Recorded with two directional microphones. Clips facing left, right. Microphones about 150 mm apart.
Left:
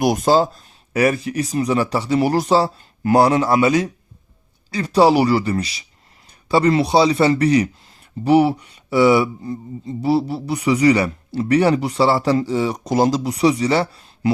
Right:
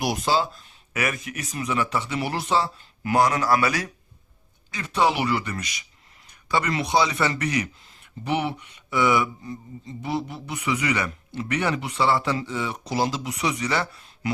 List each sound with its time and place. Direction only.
0.0 s speech: 45° left (ahead or behind); by 3.9 s 20° left (ahead or behind)
4.7 s speech: 35° left (ahead or behind)